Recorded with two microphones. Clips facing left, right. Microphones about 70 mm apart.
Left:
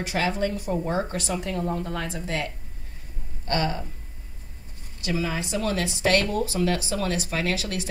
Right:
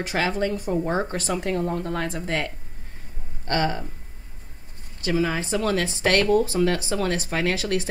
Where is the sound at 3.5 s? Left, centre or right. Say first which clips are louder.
Right 2 dB; right.